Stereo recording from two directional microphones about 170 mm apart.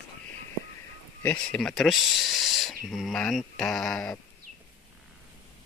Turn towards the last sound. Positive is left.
turn(degrees=5)  # may be behind; listen again after turning